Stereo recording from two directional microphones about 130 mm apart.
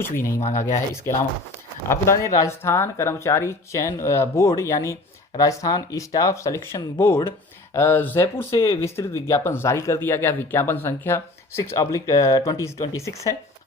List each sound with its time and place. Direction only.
0.0 s speech: 20° left (ahead or behind)
1.9 s speech: 25° left (ahead or behind)